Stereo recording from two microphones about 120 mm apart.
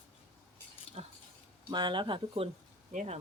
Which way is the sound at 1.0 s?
50° right (ahead or behind).